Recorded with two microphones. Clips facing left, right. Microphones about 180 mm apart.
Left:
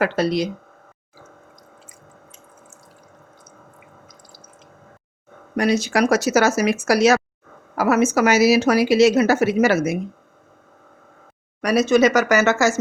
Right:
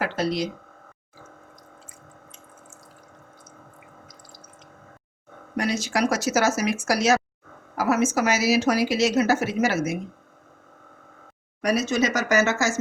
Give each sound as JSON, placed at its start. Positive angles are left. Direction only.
{"t": 0.0, "sound": "speech", "side_deg": 65}
{"t": 5.5, "sound": "a woman's voice", "side_deg": 65}
{"t": 11.6, "sound": "a woman's voice", "side_deg": 70}